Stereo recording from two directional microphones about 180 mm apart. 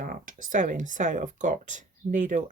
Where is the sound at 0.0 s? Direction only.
50° right (ahead or behind).